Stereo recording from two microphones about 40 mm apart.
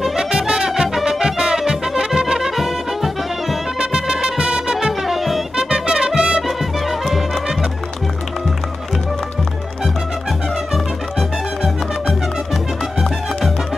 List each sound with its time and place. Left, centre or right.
0.0 s music: centre
2.5 s brass instrument: centre
3.8 s music: right
5.0 s music: centre
5.6 s music: centre
10.7 s music: centre